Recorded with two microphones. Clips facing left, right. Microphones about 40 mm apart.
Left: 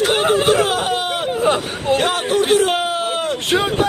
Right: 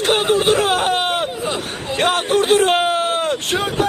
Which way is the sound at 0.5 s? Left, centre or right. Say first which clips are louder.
Even; right.